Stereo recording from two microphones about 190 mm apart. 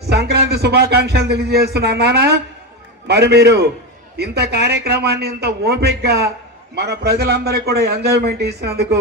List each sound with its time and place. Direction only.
0.1 s a man's voice: 60° right (ahead or behind)